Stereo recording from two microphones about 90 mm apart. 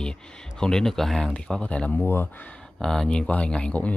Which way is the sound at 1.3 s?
15° left (ahead or behind).